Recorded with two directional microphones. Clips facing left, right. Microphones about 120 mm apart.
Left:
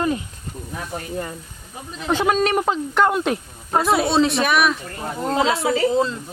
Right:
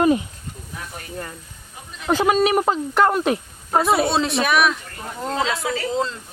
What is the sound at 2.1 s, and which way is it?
Speech, 5° right (ahead or behind).